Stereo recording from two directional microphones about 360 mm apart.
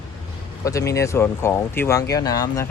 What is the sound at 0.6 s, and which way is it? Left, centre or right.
Speech, centre.